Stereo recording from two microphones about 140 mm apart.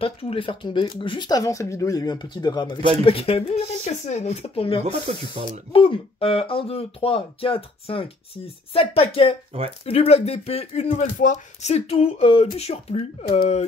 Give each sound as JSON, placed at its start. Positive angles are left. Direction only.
{"t": 0.0, "sound": "speech", "side_deg": 40}
{"t": 3.0, "sound": "speech", "side_deg": 40}
{"t": 5.1, "sound": "speech", "side_deg": -50}
{"t": 5.7, "sound": "speech", "side_deg": 40}